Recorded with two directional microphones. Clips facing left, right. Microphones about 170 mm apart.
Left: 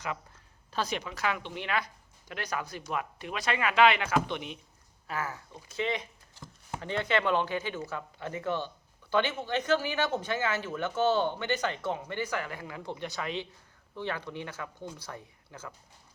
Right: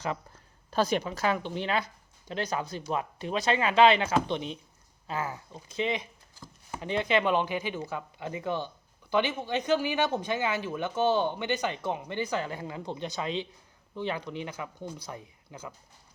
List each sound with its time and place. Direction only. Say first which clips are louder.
0.0 s a sound: right 4 dB; 30° right (ahead or behind)
0.7 s speech: right 6 dB; 45° right (ahead or behind)
5.0 s speech: right 2 dB; 20° right (ahead or behind)